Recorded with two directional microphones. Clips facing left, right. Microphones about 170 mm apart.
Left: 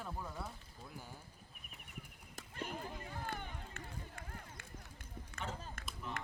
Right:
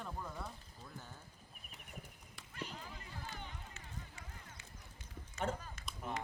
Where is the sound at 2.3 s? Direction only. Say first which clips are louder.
Left 3 dB; 50° left (ahead or behind).